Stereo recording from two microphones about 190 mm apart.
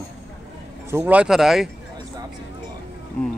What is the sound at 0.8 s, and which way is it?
Speech, 10° right (ahead or behind).